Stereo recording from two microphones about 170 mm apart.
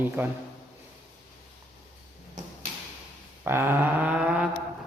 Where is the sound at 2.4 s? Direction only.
45° right (ahead or behind).